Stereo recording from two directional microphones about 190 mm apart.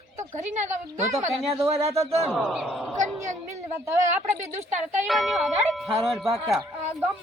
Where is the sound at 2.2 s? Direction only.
Centre (ahead or behind).